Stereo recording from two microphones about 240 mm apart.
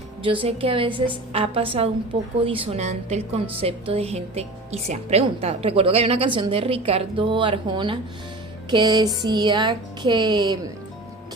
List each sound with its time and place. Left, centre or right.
0.2 s a woman's voice: right